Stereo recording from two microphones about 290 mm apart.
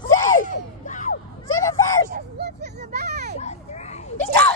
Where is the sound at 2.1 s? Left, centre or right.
Right.